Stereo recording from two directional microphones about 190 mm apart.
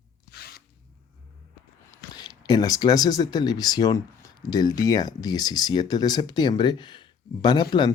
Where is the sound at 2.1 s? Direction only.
20° left (ahead or behind).